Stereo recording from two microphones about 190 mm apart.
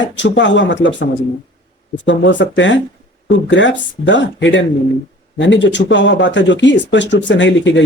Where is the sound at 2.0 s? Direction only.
70° left (ahead or behind).